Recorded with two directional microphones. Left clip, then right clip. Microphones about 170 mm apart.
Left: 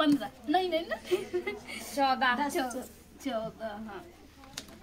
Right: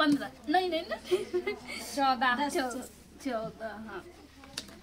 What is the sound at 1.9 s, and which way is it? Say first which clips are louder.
Speech: even; 35° left (ahead or behind).